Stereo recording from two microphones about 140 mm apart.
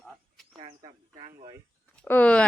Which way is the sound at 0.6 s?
35° right (ahead or behind).